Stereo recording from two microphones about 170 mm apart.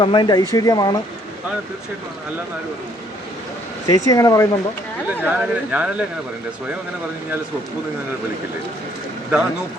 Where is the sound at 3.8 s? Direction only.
20° left (ahead or behind).